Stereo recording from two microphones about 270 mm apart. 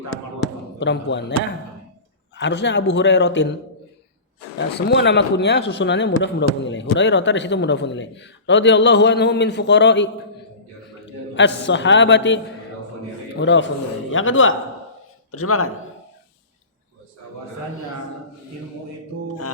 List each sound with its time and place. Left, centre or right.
0.8 s speech: left
2.3 s speech: left
11.3 s speech: left
13.4 s a man's voice: left